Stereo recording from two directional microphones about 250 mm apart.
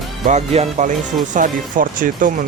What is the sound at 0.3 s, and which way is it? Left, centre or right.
Speech, right.